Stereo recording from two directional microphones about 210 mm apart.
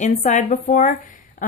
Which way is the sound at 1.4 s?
40° left (ahead or behind).